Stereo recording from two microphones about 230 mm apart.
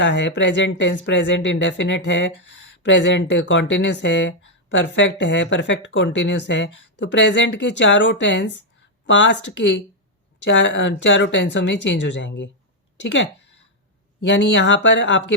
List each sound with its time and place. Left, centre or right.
0.0 s speech: left